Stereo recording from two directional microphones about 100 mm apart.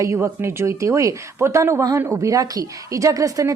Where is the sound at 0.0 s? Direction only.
30° right (ahead or behind).